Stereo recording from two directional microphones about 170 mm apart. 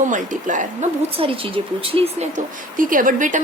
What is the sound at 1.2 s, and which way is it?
Speech, 30° right (ahead or behind).